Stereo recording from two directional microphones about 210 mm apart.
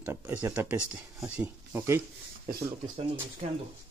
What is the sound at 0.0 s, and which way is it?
Speech, 10° right (ahead or behind).